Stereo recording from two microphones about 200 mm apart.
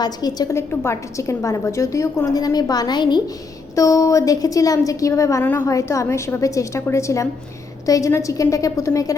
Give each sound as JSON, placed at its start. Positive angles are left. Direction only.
{"t": 0.0, "sound": "a woman's voice", "side_deg": 20}